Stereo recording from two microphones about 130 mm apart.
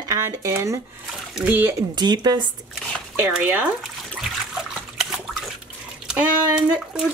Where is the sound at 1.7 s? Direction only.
35° right (ahead or behind).